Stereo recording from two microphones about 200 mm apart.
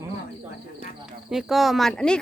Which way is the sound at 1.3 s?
Centre (ahead or behind).